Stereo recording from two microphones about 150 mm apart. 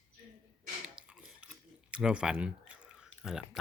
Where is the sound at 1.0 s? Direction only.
5° right (ahead or behind).